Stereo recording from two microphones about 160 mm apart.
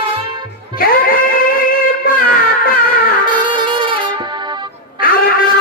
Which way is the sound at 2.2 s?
65° left (ahead or behind).